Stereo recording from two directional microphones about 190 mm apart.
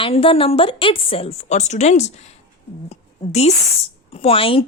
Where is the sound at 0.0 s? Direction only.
30° left (ahead or behind).